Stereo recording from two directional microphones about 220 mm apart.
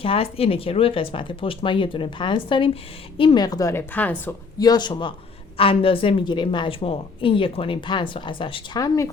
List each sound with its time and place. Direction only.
0.0 s a woman's voice: 25° left (ahead or behind)